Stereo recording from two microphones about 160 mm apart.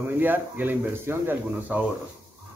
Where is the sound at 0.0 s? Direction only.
10° right (ahead or behind).